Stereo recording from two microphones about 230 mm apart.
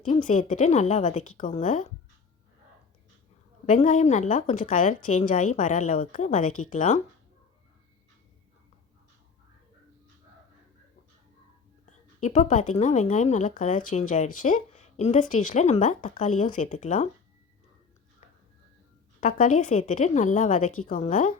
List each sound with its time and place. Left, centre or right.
0.0 s speech: left
3.7 s speech: left
12.2 s speech: left
19.2 s speech: left